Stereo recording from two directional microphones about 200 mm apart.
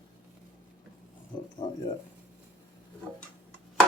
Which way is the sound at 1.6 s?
20° left (ahead or behind).